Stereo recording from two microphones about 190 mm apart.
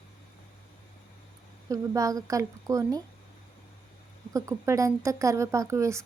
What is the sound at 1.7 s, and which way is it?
A woman's voice, 15° right (ahead or behind).